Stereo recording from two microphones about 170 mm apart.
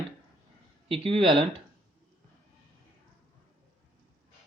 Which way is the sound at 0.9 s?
35° right (ahead or behind).